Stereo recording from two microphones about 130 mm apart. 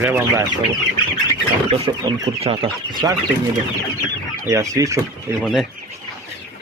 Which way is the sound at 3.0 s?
20° right (ahead or behind).